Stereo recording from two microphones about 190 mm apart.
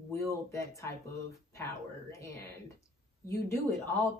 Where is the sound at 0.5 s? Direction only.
15° left (ahead or behind).